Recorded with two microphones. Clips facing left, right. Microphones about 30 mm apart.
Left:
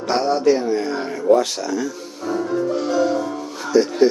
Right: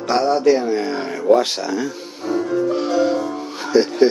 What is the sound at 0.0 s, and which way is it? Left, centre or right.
A man's voice, centre.